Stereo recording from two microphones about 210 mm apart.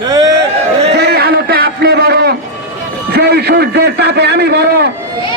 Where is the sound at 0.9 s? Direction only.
50° right (ahead or behind).